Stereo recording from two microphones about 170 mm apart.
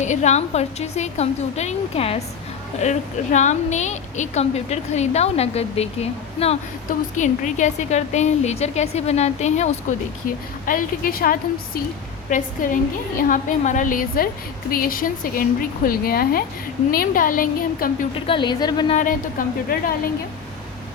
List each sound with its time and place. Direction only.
0.0 s a woman's voice: 45° left (ahead or behind)
10.7 s a woman's voice: 55° left (ahead or behind)
18.3 s speech: 25° left (ahead or behind)
18.9 s a woman's voice: 50° left (ahead or behind)